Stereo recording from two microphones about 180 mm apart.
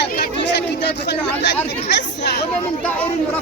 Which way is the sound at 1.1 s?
70° left (ahead or behind).